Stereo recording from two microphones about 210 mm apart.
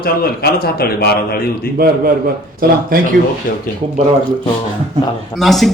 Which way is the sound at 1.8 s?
40° right (ahead or behind).